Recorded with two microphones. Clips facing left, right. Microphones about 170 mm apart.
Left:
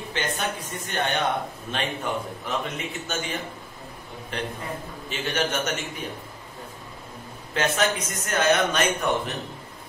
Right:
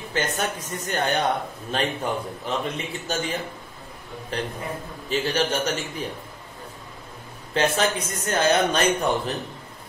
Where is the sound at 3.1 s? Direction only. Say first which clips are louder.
Right 4 dB; 35° right (ahead or behind).